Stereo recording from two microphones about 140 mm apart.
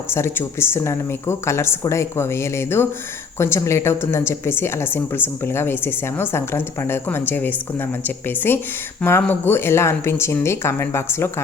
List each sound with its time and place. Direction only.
0.1 s a woman's voice: 15° left (ahead or behind)